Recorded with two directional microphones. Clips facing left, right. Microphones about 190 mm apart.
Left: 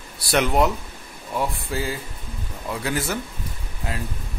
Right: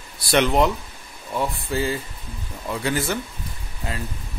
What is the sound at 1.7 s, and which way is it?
Speech, 5° left (ahead or behind).